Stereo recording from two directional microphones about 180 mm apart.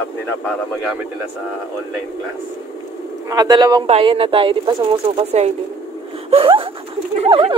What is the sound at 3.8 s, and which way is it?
Speech, 30° right (ahead or behind).